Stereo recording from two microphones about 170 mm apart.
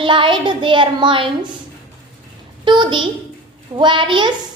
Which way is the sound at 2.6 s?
25° right (ahead or behind).